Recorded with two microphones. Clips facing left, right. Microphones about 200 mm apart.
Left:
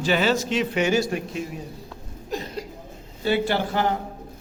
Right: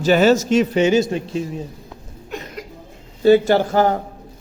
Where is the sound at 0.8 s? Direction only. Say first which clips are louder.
Right 6 dB; 20° right (ahead or behind).